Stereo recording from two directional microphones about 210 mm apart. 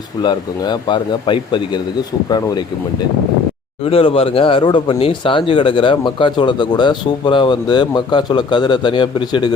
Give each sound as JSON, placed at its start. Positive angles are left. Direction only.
{"t": 0.2, "sound": "speech", "side_deg": 20}
{"t": 3.8, "sound": "speech", "side_deg": 25}